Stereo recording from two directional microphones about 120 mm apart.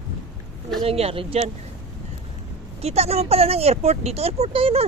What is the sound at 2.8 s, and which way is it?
Speech, 60° right (ahead or behind).